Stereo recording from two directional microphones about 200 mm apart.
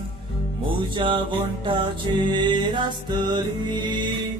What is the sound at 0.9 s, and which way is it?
Music, 25° right (ahead or behind).